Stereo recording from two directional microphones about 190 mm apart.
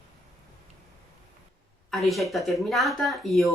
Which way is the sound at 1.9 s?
Centre (ahead or behind).